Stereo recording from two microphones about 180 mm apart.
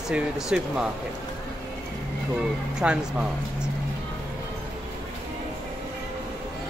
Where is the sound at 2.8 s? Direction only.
5° right (ahead or behind).